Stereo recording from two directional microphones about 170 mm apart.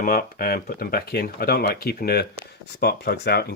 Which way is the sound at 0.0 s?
60° left (ahead or behind).